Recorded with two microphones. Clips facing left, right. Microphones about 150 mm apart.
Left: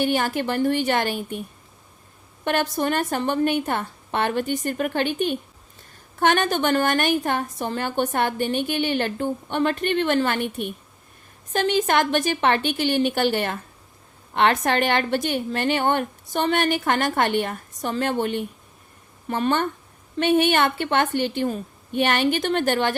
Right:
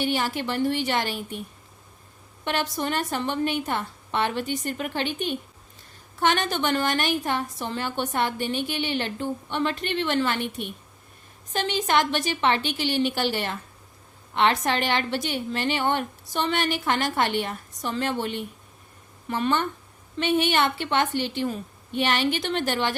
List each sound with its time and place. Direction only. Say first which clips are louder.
0.0 s a woman's voice: left 4 dB; 50° left (ahead or behind)
2.4 s a woman's voice: left 4 dB; 50° left (ahead or behind)